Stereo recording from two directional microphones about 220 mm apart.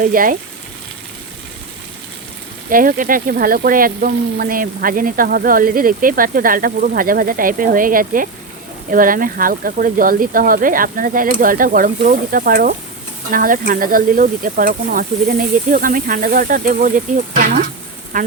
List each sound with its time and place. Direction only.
0.0 s speech: 40° right (ahead or behind)
2.6 s speech: 40° right (ahead or behind)
18.1 s speech: 35° right (ahead or behind)